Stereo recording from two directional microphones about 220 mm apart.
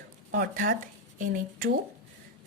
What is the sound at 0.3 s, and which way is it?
Speech, 40° right (ahead or behind).